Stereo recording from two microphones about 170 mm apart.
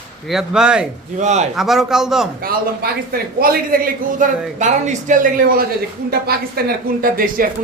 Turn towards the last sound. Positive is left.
turn(degrees=-55)  # may be behind; listen again after turning